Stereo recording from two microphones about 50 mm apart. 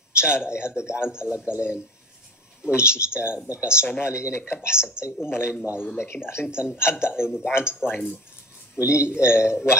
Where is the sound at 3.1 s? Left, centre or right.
Right.